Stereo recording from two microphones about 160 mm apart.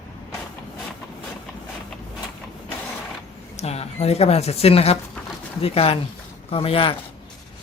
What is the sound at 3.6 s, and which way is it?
Speech, 40° left (ahead or behind).